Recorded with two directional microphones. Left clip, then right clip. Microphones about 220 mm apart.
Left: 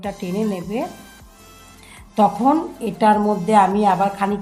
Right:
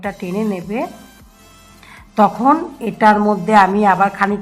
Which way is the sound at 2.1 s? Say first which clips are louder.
Right 3 dB; centre (ahead or behind).